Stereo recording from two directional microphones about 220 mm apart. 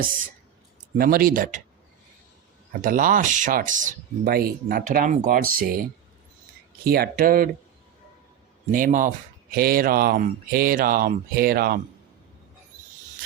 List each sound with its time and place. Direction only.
0.9 s speech: 40° right (ahead or behind)
2.8 s speech: 40° right (ahead or behind)
6.8 s speech: 45° right (ahead or behind)
8.7 s speech: 35° right (ahead or behind)